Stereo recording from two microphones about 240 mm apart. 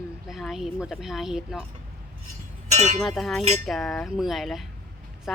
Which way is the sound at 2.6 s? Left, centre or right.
Right.